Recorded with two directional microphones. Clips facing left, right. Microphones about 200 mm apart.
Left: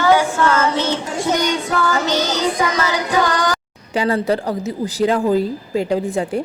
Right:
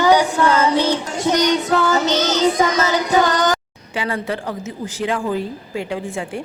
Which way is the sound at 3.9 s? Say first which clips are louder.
Left 6 dB; 40° left (ahead or behind).